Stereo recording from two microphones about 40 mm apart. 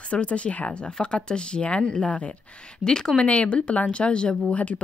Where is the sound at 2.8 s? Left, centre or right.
Centre.